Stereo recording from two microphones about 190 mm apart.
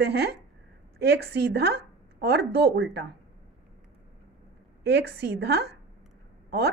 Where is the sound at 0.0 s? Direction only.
60° right (ahead or behind).